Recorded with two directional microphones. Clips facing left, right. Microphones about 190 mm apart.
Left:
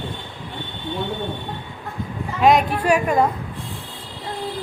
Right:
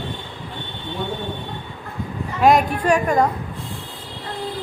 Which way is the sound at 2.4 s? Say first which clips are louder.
Even; centre (ahead or behind).